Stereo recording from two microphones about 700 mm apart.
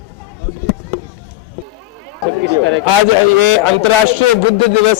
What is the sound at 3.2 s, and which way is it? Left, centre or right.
Speech, left.